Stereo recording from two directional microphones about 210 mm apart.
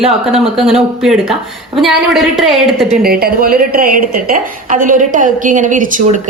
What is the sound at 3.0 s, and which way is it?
A woman's voice, 45° right (ahead or behind).